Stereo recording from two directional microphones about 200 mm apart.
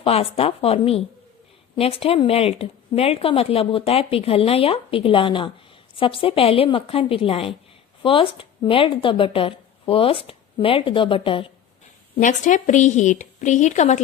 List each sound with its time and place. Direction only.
0.0 s speech: 30° left (ahead or behind)
12.2 s a woman's voice: 40° left (ahead or behind)